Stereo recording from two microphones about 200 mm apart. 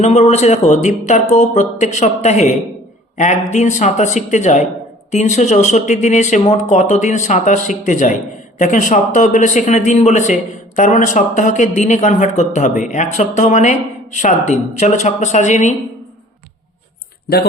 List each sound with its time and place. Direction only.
0.0 s speech: 35° left (ahead or behind)